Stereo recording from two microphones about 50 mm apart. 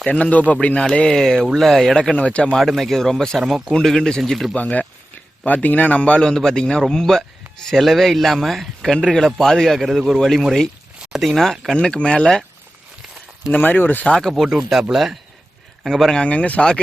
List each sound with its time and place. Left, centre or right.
0.1 s speech: left
1.0 s a man's voice: centre
2.1 s speech: left
2.6 s a man's voice: centre
4.5 s a man's voice: left
13.6 s speech: left
14.1 s a man's voice: centre
14.4 s speech: centre
16.2 s speech: left